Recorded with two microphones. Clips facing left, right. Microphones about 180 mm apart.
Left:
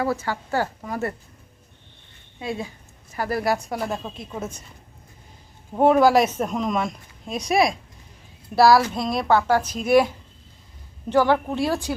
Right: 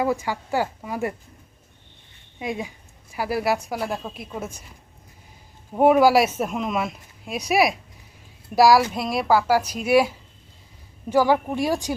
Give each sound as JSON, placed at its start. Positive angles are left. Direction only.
{"t": 0.0, "sound": "speech", "side_deg": -15}
{"t": 2.4, "sound": "a woman's voice", "side_deg": -15}
{"t": 5.7, "sound": "speech", "side_deg": -10}
{"t": 11.1, "sound": "speech", "side_deg": -10}